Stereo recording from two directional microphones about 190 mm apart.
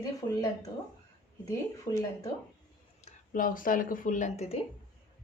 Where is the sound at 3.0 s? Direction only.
45° left (ahead or behind).